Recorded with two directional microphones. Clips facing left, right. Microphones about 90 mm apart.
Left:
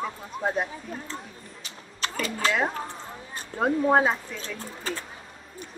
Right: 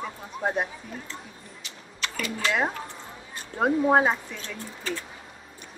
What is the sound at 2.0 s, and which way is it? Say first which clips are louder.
Speech: left 2 dB; 35° left (ahead or behind).